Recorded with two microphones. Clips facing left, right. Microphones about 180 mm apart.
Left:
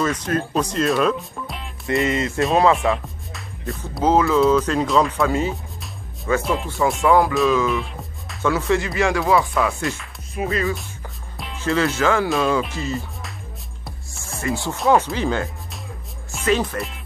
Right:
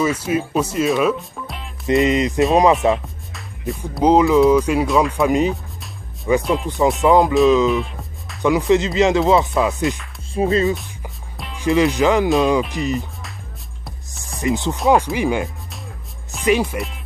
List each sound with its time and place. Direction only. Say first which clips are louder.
0.0 s speech: right 3 dB; 10° right (ahead or behind)
1.9 s speech: right 5 dB; 20° right (ahead or behind)
3.3 s music: right 4 dB; centre (ahead or behind)
4.0 s speech: right 4 dB; 15° right (ahead or behind)
4.8 s speech: right 1 dB; centre (ahead or behind)
5.2 s speech: right 4 dB; 15° right (ahead or behind)
6.4 s speech: right 3 dB; centre (ahead or behind)
7.1 s speech: right 4 dB; 20° right (ahead or behind)
7.7 s music: right 3 dB; centre (ahead or behind)
8.4 s speech: right 4 dB; 15° right (ahead or behind)
11.5 s speech: right 4 dB; 15° right (ahead or behind)
14.4 s speech: right 3 dB; 20° right (ahead or behind)
16.7 s speech: right 2 dB; centre (ahead or behind)